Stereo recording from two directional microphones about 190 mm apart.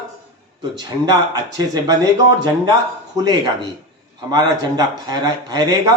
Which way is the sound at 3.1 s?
20° right (ahead or behind).